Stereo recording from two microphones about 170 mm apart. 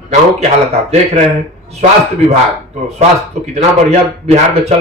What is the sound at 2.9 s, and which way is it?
Speech, 40° right (ahead or behind).